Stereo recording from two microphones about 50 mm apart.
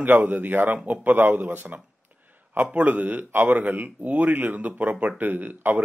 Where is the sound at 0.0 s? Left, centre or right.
Right.